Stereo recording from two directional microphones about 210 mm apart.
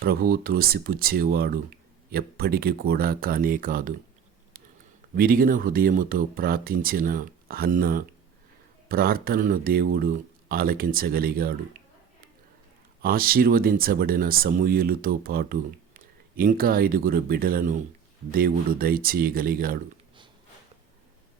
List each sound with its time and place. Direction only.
0.0 s speech: 45° right (ahead or behind)
5.1 s speech: 45° right (ahead or behind)
13.0 s speech: 45° right (ahead or behind)